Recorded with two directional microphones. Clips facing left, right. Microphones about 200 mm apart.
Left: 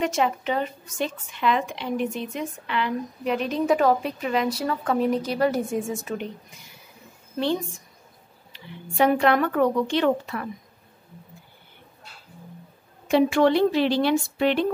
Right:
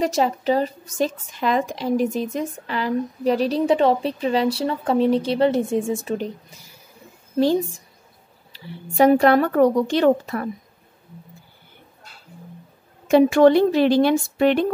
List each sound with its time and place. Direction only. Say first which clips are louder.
0.0 s speech: right 3 dB; 35° right (ahead or behind)
8.5 s speech: right 5 dB; 35° right (ahead or behind)
13.1 s a woman's voice: right 5 dB; 45° right (ahead or behind)